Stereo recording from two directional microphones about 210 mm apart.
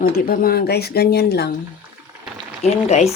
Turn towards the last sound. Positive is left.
turn(degrees=30)  # may be behind; listen again after turning